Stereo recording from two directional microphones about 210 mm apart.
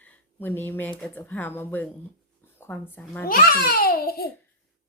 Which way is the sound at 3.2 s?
45° left (ahead or behind).